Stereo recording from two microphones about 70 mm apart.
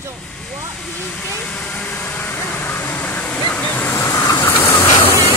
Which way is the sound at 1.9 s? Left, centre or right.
Left.